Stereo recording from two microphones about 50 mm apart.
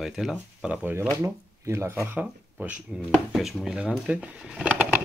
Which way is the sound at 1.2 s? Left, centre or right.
Right.